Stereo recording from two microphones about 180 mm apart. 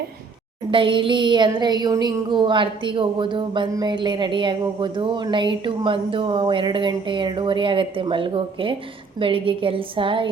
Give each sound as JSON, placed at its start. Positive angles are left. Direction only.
{"t": 0.7, "sound": "speech", "side_deg": -30}